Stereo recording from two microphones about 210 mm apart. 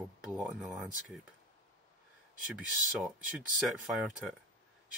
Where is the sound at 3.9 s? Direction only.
Centre (ahead or behind).